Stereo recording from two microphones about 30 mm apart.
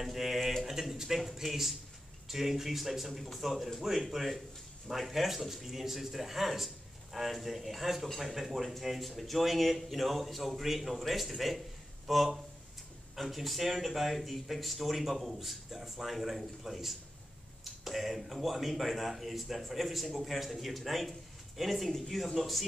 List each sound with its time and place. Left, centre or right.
0.0 s a man's voice: centre